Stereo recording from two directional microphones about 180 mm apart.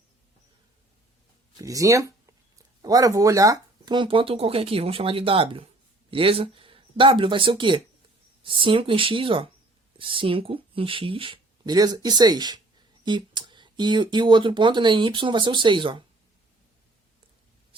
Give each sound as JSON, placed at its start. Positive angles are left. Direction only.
{"t": 1.5, "sound": "speech", "side_deg": -20}